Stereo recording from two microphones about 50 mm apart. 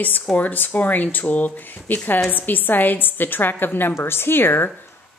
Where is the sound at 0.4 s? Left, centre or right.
Left.